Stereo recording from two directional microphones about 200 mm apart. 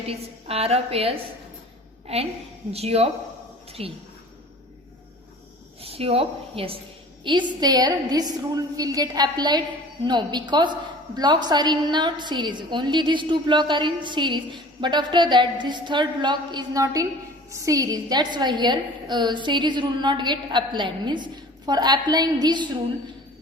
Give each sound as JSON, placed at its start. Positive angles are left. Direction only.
{"t": 0.1, "sound": "a woman's voice", "side_deg": -30}
{"t": 2.7, "sound": "speech", "side_deg": -30}
{"t": 3.7, "sound": "a sound", "side_deg": -30}
{"t": 5.8, "sound": "a woman's voice", "side_deg": -30}